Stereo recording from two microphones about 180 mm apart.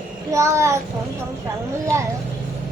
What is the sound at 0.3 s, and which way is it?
Speech, 15° right (ahead or behind).